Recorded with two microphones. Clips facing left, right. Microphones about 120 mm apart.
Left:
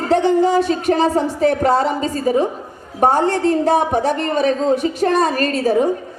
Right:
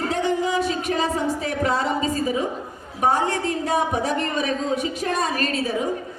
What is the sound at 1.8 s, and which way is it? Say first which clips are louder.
A woman's voice: left 4 dB; 35° left (ahead or behind).